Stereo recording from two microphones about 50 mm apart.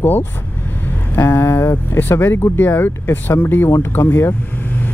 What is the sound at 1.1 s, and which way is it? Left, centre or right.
Speech, left.